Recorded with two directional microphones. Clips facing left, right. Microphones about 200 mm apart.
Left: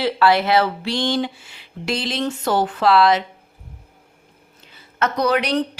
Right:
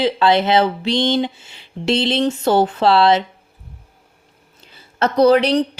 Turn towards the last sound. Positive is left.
turn(degrees=-30)  # may be behind; listen again after turning